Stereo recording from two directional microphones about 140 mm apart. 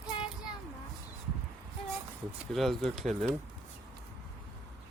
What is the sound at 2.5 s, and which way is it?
Speech, centre (ahead or behind).